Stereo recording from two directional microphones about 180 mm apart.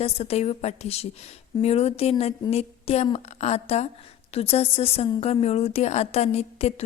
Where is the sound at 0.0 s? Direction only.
35° left (ahead or behind).